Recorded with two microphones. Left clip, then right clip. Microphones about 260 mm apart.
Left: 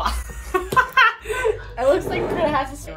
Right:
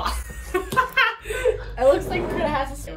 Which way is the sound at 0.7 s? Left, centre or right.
Centre.